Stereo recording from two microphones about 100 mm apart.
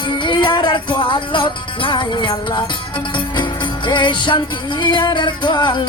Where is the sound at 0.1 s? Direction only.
50° left (ahead or behind).